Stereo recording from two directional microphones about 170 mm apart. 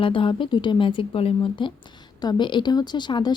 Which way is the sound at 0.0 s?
30° left (ahead or behind).